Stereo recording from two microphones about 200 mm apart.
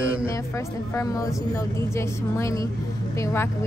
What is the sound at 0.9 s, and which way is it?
Speech, 15° left (ahead or behind).